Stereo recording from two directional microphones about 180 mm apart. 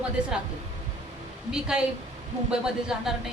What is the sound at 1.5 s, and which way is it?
A woman's voice, 5° right (ahead or behind).